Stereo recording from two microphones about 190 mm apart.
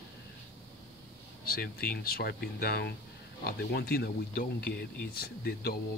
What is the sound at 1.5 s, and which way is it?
Speech, 50° left (ahead or behind).